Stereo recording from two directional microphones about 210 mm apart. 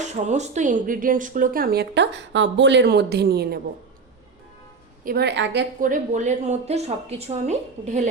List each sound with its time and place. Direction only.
0.0 s speech: 35° right (ahead or behind); by 3.6 s 50° right (ahead or behind)
5.0 s speech: 50° right (ahead or behind)
5.8 s a woman's voice: 35° right (ahead or behind)